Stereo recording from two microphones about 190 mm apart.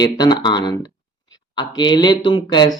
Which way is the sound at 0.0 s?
20° left (ahead or behind).